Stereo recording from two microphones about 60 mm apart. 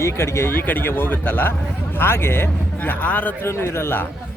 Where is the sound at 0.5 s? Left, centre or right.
Left.